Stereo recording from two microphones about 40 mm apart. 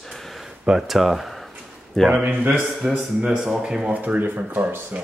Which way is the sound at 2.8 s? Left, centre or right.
Right.